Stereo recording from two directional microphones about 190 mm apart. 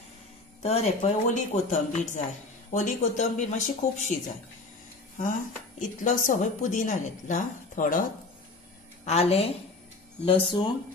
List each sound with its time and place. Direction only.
0.6 s speech: 35° left (ahead or behind)
5.8 s a woman's voice: 45° left (ahead or behind)
9.0 s speech: 35° left (ahead or behind)